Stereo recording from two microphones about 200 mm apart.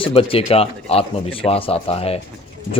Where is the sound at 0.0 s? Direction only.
30° left (ahead or behind).